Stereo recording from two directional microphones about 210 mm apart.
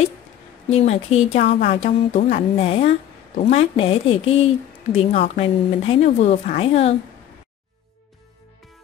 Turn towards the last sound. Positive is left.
turn(degrees=30)  # may be behind; listen again after turning